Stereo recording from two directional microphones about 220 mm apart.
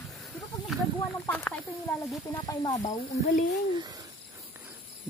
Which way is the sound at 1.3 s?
10° left (ahead or behind).